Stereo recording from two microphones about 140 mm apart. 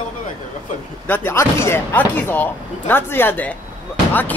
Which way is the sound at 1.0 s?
15° left (ahead or behind).